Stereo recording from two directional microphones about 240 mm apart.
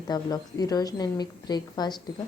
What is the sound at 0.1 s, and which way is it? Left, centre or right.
Speech, centre.